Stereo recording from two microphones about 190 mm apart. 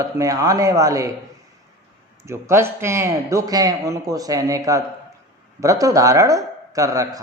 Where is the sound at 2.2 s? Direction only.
15° right (ahead or behind).